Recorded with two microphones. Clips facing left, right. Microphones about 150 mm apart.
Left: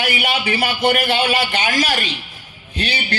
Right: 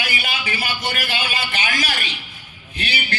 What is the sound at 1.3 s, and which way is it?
Speech, 30° left (ahead or behind).